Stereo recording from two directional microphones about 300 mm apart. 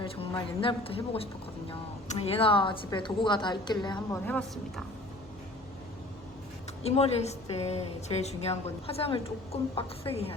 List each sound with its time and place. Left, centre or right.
0.0 s a woman's voice: centre
6.8 s a woman's voice: left